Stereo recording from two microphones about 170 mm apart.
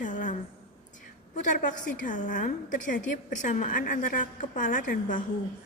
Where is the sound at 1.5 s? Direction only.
50° left (ahead or behind).